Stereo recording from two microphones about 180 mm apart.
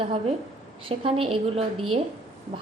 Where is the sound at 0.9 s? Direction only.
30° right (ahead or behind).